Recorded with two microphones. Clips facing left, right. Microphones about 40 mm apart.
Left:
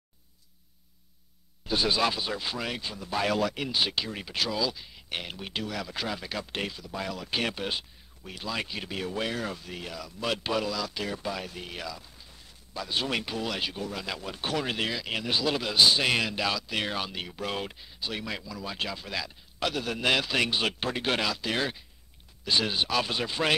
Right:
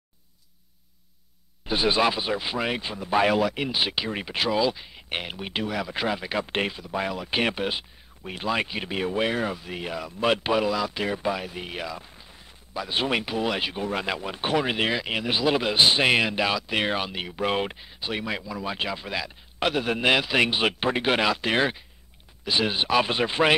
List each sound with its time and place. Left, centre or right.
1.7 s speech: right
3.3 s speech: centre
8.2 s speech: right
22.4 s speech: centre